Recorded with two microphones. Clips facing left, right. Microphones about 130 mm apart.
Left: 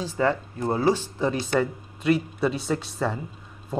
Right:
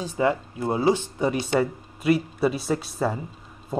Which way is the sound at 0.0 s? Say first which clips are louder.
Right 1 dB; 15° right (ahead or behind).